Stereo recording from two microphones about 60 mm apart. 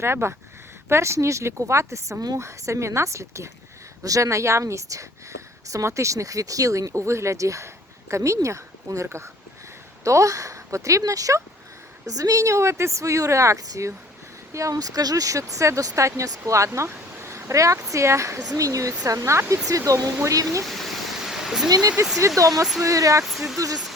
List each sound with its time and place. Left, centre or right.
0.0 s speech: right
2.4 s speech: right
4.0 s speech: right
12.0 s speech: right
14.5 s speech: right
16.5 s speech: right
18.4 s speech: right
21.2 s a sound: centre
21.7 s speech: right
22.4 s speech: right
23.2 s speech: centre
23.6 s speech: right